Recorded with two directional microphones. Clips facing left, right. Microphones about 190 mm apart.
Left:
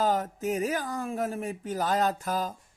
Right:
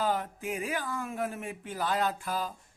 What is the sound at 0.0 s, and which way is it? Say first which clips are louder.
Speech: left 4 dB; 40° left (ahead or behind).